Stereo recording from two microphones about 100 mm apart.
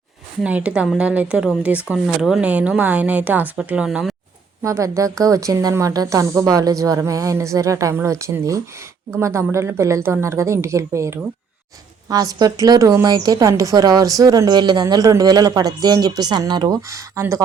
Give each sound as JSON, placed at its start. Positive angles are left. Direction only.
{"t": 0.4, "sound": "speech", "side_deg": -15}
{"t": 2.0, "sound": "speech", "side_deg": 0}
{"t": 2.4, "sound": "speech", "side_deg": -15}
{"t": 4.6, "sound": "a woman's voice", "side_deg": -30}